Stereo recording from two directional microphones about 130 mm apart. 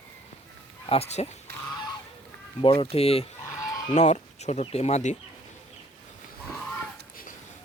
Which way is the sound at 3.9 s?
65° left (ahead or behind).